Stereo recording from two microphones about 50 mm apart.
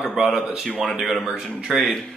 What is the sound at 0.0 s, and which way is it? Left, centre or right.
A man's voice, centre.